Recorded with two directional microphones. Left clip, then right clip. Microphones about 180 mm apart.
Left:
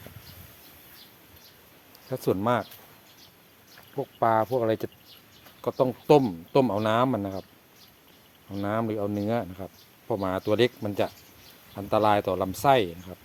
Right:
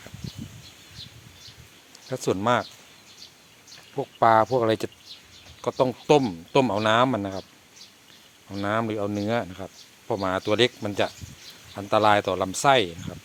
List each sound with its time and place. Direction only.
2.0 s speech: 5° left (ahead or behind)
3.9 s speech: 15° right (ahead or behind)
5.6 s speech: 5° right (ahead or behind)
8.4 s speech: centre (ahead or behind)